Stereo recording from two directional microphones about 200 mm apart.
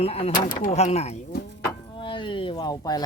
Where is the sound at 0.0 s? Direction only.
30° left (ahead or behind).